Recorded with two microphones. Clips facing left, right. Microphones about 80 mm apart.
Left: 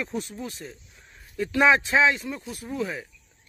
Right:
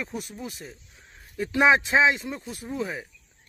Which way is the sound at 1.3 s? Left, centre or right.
Centre.